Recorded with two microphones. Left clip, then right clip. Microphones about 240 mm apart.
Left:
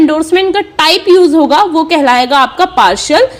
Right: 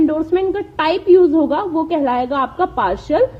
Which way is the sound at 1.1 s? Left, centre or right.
Left.